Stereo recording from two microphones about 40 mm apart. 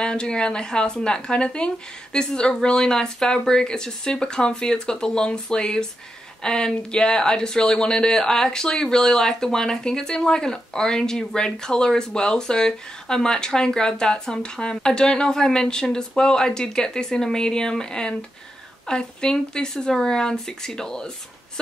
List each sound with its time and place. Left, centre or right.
0.0 s speech: centre